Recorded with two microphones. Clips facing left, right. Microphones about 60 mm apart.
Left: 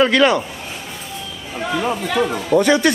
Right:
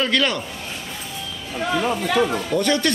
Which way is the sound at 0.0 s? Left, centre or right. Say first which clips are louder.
Left 7 dB; centre.